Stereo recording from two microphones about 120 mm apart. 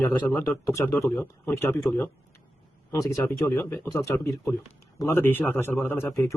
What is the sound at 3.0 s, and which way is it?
Speech, 25° left (ahead or behind).